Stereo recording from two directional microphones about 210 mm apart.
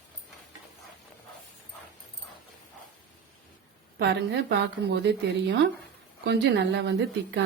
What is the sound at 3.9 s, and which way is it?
A woman's voice, 50° right (ahead or behind).